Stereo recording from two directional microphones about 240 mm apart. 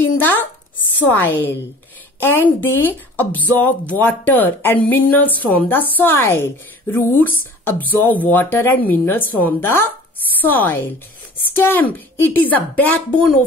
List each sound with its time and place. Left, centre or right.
0.2 s speech: centre
2.6 s speech: centre